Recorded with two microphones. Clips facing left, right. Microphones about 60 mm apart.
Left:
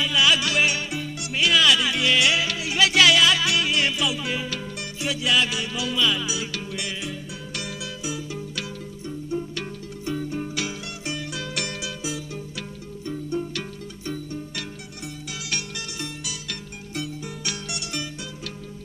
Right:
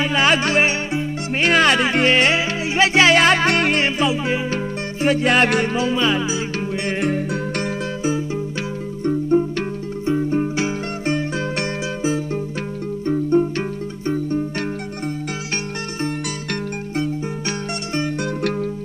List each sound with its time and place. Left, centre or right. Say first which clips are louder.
0.0 s music: right 4 dB; right
3.8 s music: right 6 dB; right
5.0 s music: right 7 dB; right
7.0 s music: right 13 dB; right
10.0 s music: right 9 dB; right
16.9 s music: right 7 dB; right